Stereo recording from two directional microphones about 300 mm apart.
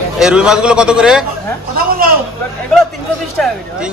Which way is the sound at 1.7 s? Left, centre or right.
Right.